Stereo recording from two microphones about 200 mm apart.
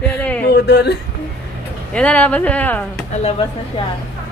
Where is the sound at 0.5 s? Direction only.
55° left (ahead or behind).